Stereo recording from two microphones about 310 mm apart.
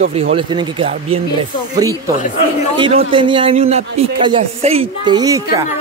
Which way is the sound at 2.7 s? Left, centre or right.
Centre.